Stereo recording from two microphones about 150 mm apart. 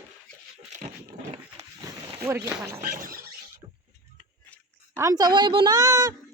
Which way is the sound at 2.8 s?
65° right (ahead or behind).